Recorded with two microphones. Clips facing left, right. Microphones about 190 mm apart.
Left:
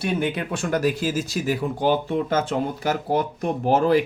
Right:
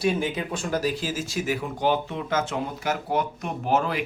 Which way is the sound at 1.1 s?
35° left (ahead or behind).